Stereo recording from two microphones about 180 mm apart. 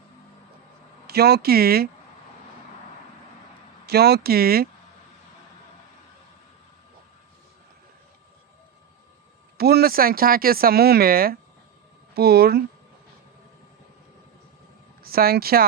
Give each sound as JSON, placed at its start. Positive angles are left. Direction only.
{"t": 1.0, "sound": "speech", "side_deg": -60}
{"t": 3.8, "sound": "speech", "side_deg": -65}
{"t": 9.6, "sound": "speech", "side_deg": -60}
{"t": 15.0, "sound": "speech", "side_deg": -55}